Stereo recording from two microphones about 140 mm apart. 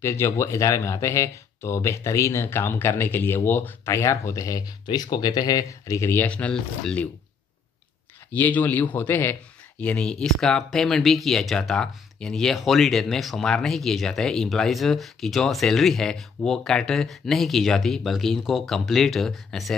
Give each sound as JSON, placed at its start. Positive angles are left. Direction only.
{"t": 0.0, "sound": "speech", "side_deg": 20}
{"t": 8.3, "sound": "speech", "side_deg": 10}